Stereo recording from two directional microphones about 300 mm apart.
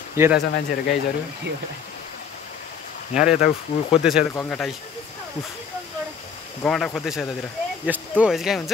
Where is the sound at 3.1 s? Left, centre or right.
Centre.